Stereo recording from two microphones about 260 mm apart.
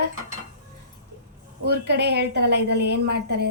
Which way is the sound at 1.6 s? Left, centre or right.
Right.